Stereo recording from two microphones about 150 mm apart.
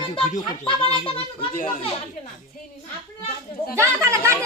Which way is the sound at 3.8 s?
20° right (ahead or behind).